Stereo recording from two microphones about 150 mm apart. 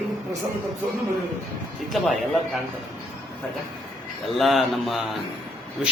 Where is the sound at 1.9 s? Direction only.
Centre (ahead or behind).